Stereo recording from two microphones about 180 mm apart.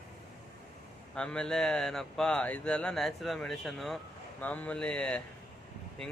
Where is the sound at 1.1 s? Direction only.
5° left (ahead or behind).